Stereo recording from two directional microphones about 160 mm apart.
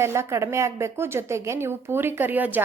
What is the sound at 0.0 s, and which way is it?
A woman's voice, 15° right (ahead or behind).